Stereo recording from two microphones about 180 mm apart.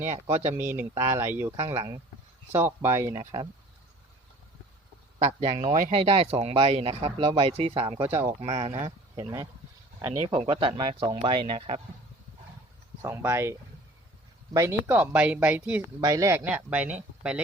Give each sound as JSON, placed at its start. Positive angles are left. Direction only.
{"t": 0.5, "sound": "speech", "side_deg": -10}
{"t": 5.2, "sound": "speech", "side_deg": -40}
{"t": 5.9, "sound": "speech", "side_deg": -35}
{"t": 8.0, "sound": "speech", "side_deg": -15}
{"t": 8.3, "sound": "speech", "side_deg": -40}
{"t": 8.7, "sound": "speech", "side_deg": -15}
{"t": 10.2, "sound": "speech", "side_deg": -30}
{"t": 13.0, "sound": "speech", "side_deg": -15}